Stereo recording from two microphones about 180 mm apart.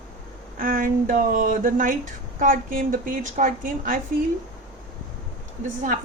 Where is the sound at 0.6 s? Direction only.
50° right (ahead or behind).